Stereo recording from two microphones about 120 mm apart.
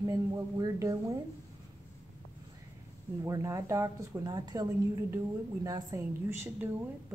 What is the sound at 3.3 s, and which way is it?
Speech, 25° right (ahead or behind).